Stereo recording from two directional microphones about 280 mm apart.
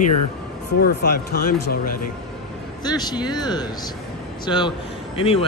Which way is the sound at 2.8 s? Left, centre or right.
Centre.